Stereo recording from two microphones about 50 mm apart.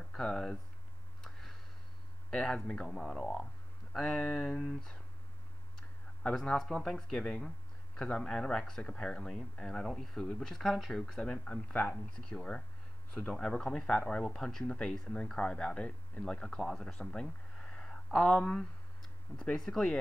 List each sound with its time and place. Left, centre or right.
0.1 s speech: centre
1.2 s a sound: centre
2.3 s speech: centre
6.3 s speech: centre
15.5 s speech: left